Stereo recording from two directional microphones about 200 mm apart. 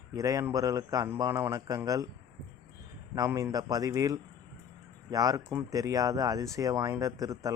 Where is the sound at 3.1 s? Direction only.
15° right (ahead or behind).